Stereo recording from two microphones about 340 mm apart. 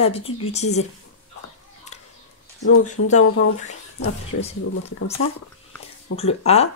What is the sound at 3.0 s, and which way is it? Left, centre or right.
Speech, left.